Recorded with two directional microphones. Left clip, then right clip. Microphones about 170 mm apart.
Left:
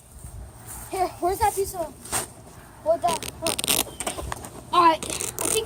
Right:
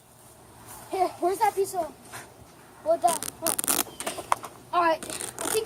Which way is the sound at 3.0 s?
20° right (ahead or behind).